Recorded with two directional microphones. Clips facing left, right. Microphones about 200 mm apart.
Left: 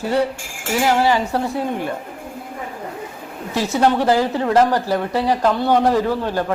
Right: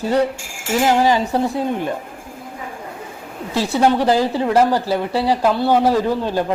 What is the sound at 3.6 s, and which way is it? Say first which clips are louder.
Speech: right 1 dB; 15° right (ahead or behind).